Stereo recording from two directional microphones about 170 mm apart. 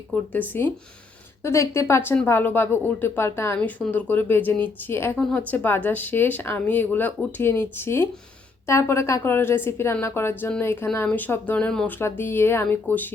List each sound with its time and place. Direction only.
0.1 s speech: 10° left (ahead or behind)